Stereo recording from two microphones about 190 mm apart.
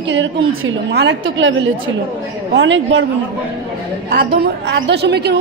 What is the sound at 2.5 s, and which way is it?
Speech, 75° right (ahead or behind).